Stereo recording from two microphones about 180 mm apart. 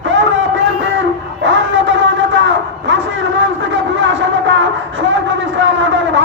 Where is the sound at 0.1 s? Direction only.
90° right.